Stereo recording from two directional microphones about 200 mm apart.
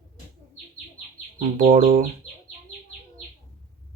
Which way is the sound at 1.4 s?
40° right (ahead or behind).